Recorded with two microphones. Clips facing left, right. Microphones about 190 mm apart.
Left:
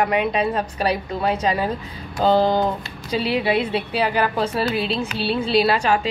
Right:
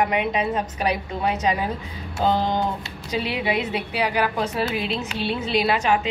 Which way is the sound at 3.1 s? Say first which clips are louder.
Left 4 dB; 15° right (ahead or behind).